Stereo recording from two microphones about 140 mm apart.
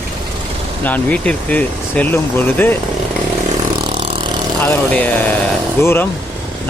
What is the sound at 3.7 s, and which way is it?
Vehicle, 35° right (ahead or behind).